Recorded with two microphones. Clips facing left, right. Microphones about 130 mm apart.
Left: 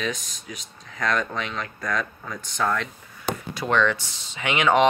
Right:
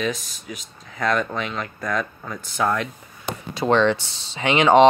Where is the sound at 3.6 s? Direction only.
30° right (ahead or behind).